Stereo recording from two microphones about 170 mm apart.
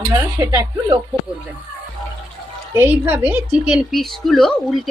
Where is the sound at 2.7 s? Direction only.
10° right (ahead or behind).